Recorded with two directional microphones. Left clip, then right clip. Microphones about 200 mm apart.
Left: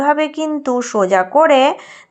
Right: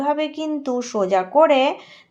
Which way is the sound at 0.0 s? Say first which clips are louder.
Left 7 dB; 25° left (ahead or behind).